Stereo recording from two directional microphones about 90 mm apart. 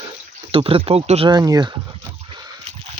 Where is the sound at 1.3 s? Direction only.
50° right (ahead or behind).